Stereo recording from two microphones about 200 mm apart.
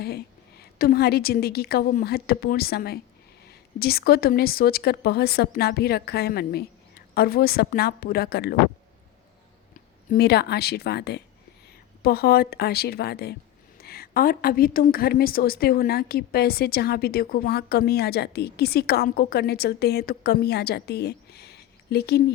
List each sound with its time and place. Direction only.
0.0 s a woman's voice: 55° left (ahead or behind)
10.1 s a woman's voice: 55° left (ahead or behind)